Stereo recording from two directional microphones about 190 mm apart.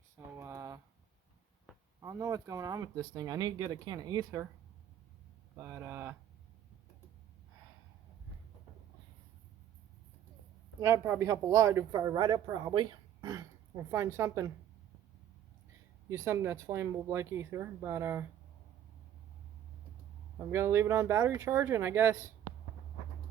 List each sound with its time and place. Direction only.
0.3 s typing: 15° right (ahead or behind)
2.0 s speech: 15° right (ahead or behind)
5.5 s speech: 10° right (ahead or behind)
10.8 s speech: 15° right (ahead or behind)
16.0 s speech: 15° right (ahead or behind)
20.5 s speech: 15° right (ahead or behind)